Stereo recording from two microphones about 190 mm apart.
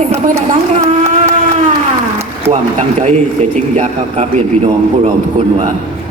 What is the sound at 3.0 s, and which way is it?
A man's voice, 35° right (ahead or behind).